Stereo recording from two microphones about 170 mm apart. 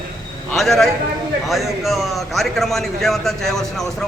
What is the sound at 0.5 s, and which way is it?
A man's voice, centre (ahead or behind).